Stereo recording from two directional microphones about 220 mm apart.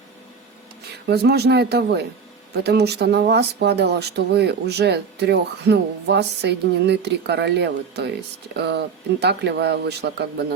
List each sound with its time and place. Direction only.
1.0 s speech: 45° right (ahead or behind)